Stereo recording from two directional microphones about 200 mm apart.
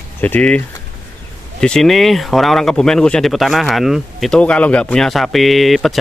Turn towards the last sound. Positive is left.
turn(degrees=0)  # may be behind; listen again after turning